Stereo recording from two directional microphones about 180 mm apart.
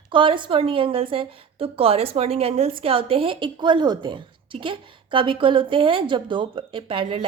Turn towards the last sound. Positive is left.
turn(degrees=-30)  # may be behind; listen again after turning